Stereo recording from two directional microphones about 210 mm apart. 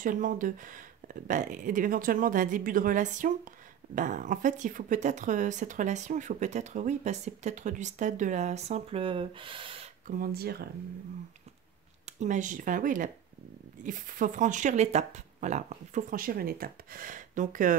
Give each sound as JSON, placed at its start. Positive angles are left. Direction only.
{"t": 0.0, "sound": "speech", "side_deg": -40}
{"t": 10.0, "sound": "speech", "side_deg": -40}
{"t": 12.2, "sound": "speech", "side_deg": -35}